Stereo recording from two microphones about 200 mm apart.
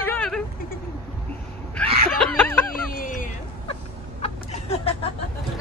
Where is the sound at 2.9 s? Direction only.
45° left (ahead or behind).